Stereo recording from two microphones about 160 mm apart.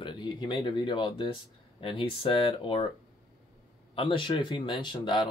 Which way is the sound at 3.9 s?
30° left (ahead or behind).